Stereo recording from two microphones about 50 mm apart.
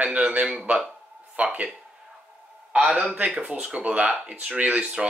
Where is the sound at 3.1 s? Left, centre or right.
Right.